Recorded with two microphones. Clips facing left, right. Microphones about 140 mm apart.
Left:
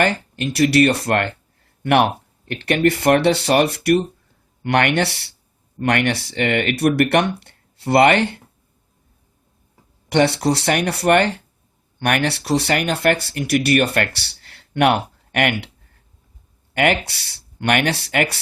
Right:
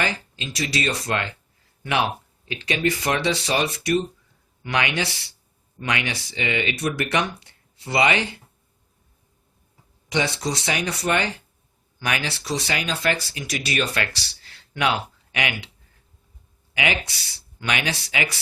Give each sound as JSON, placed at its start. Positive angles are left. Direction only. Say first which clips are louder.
{"t": 0.0, "sound": "speech", "louder": "left 8 dB", "side_deg": 60}
{"t": 10.1, "sound": "speech", "louder": "left 8 dB", "side_deg": 65}
{"t": 16.7, "sound": "speech", "louder": "left 7 dB", "side_deg": 60}